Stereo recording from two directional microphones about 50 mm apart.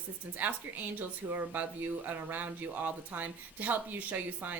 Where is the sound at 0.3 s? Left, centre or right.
Right.